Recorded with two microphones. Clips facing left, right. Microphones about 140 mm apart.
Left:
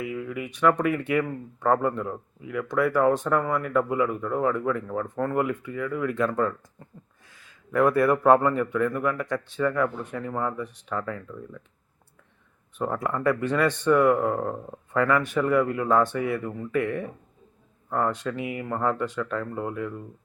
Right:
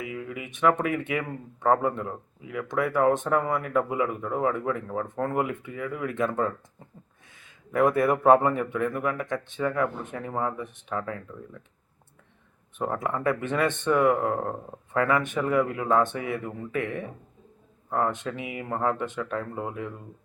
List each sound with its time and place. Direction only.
0.3 s a man's voice: 20° right (ahead or behind)
12.8 s speech: 20° right (ahead or behind)
17.8 s speech: 20° right (ahead or behind)